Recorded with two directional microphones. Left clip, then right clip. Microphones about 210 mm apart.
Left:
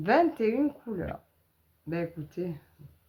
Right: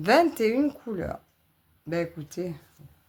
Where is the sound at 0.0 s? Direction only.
45° right (ahead or behind).